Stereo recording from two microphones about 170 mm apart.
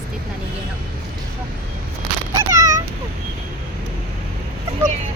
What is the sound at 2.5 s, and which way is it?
Cat, 15° right (ahead or behind).